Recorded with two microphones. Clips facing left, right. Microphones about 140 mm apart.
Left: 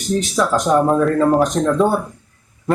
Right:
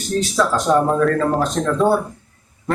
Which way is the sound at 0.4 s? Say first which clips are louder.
Right 1 dB; 15° left (ahead or behind).